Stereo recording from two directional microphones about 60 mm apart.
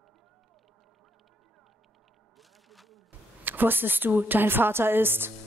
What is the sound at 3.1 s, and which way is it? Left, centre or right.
Speech, right.